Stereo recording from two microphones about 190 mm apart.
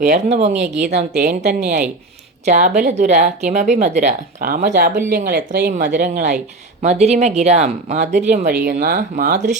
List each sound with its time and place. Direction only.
0.0 s a woman's voice: 40° right (ahead or behind); by 5.7 s 55° right (ahead or behind)
5.7 s speech: 40° right (ahead or behind)